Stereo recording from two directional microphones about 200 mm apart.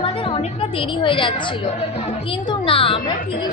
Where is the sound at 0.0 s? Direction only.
25° left (ahead or behind).